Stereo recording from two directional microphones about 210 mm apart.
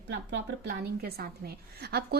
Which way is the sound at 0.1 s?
55° right (ahead or behind).